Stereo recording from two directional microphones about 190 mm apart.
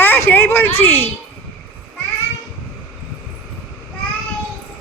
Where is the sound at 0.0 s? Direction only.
10° left (ahead or behind).